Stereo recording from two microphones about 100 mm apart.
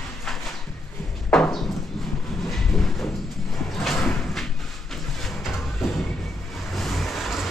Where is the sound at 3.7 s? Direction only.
Centre (ahead or behind).